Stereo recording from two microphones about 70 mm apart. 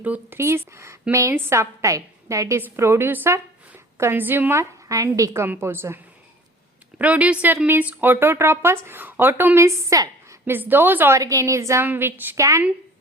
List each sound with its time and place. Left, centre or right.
0.0 s a woman's voice: right
0.3 s a woman's voice: right
2.6 s speech: right
5.1 s a woman's voice: right
5.5 s speech: right
7.0 s a woman's voice: centre
9.6 s a woman's voice: right
10.4 s speech: right
11.2 s a woman's voice: right
11.8 s a woman's voice: right
12.4 s a woman's voice: right